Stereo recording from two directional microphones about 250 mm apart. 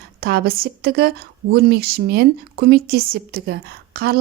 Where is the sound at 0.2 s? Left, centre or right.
Right.